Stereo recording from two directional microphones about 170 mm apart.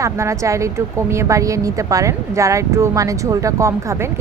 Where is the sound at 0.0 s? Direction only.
15° right (ahead or behind).